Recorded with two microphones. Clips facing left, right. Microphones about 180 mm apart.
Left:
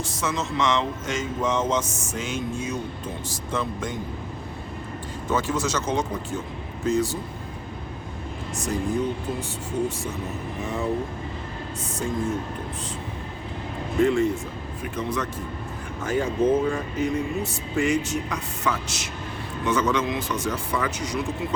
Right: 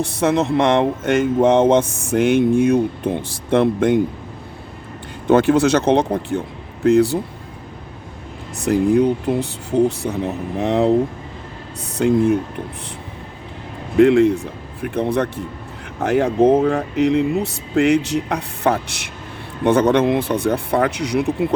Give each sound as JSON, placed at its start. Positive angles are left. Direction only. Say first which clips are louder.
{"t": 0.0, "sound": "speech", "louder": "right 11 dB", "side_deg": -60}
{"t": 5.3, "sound": "speech", "louder": "right 12 dB", "side_deg": -60}
{"t": 8.6, "sound": "speech", "louder": "right 11 dB", "side_deg": -65}
{"t": 11.9, "sound": "speech", "louder": "right 12 dB", "side_deg": -70}
{"t": 13.9, "sound": "speech", "louder": "right 9 dB", "side_deg": -70}